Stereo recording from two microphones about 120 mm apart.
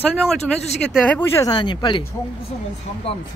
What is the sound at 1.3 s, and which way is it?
Speech, 35° left (ahead or behind).